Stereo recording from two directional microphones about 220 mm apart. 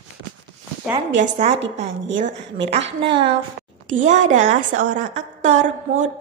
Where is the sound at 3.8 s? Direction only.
35° right (ahead or behind).